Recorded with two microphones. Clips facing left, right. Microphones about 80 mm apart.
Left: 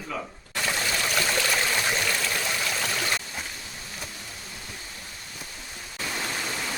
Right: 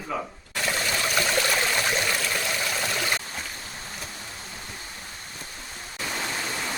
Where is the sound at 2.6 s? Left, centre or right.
Centre.